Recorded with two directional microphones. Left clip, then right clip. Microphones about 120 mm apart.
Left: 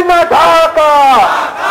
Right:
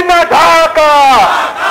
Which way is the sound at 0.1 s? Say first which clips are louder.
Right 1 dB; 40° right (ahead or behind).